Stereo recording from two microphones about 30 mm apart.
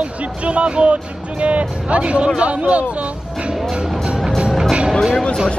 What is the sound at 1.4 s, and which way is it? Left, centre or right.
Vehicle, right.